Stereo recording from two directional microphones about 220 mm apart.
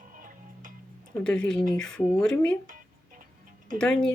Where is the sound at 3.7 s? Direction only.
5° left (ahead or behind).